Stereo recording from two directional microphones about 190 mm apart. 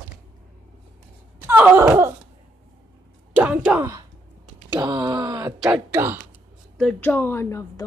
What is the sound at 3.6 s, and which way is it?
A woman's voice, 15° right (ahead or behind).